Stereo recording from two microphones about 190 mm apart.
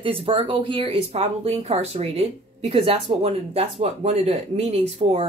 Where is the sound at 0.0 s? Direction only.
30° right (ahead or behind).